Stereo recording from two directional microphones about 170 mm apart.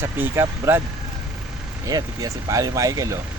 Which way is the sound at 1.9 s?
20° right (ahead or behind).